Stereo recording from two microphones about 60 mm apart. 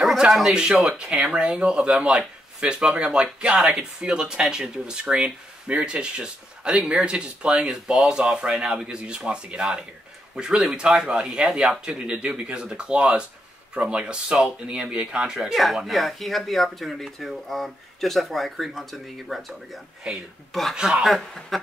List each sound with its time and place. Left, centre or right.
0.3 s speech: centre
20.1 s speech: centre
21.0 s speech: centre